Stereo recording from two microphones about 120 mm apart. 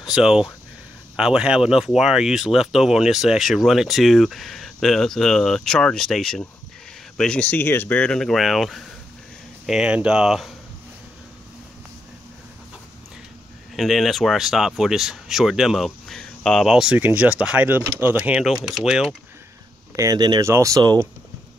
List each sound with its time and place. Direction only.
0.0 s speech: 5° right (ahead or behind)
13.7 s speech: centre (ahead or behind)
20.0 s speech: 35° right (ahead or behind)